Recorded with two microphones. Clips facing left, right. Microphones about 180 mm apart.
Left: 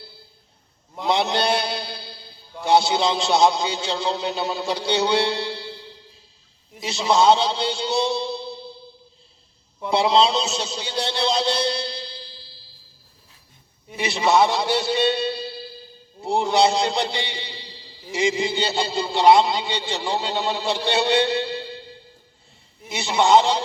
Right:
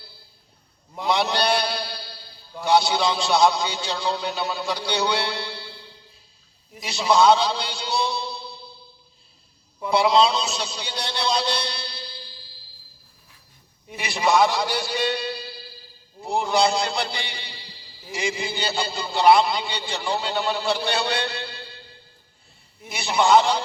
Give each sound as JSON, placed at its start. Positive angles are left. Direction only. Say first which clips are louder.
{"t": 1.0, "sound": "mantra", "louder": "left 1 dB", "side_deg": 25}
{"t": 2.6, "sound": "a man's voice", "louder": "left 1 dB", "side_deg": 25}
{"t": 9.9, "sound": "a man's voice", "louder": "even", "side_deg": 25}
{"t": 13.9, "sound": "a man's voice", "louder": "left 2 dB", "side_deg": 25}
{"t": 22.9, "sound": "a man's voice", "louder": "left 1 dB", "side_deg": 25}